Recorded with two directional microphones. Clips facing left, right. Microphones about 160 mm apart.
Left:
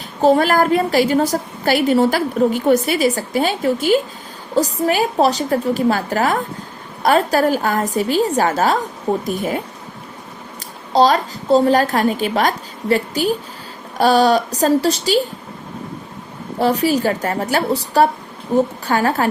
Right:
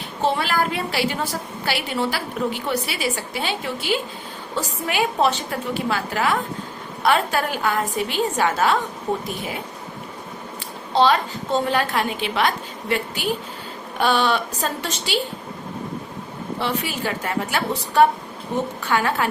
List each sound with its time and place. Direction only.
0.2 s a woman's voice: 45° left (ahead or behind)
10.9 s a woman's voice: 40° left (ahead or behind)
16.6 s a woman's voice: 40° left (ahead or behind)